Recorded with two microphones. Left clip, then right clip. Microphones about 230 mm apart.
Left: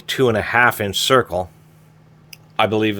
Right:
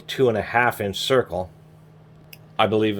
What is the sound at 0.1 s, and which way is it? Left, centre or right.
Speech, left.